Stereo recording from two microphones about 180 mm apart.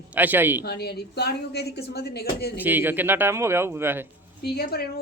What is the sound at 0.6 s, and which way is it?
Speech, 65° left (ahead or behind).